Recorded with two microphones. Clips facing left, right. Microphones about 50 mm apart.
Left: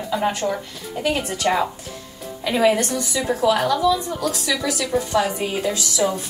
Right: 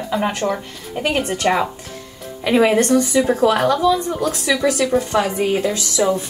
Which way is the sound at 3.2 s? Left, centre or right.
Right.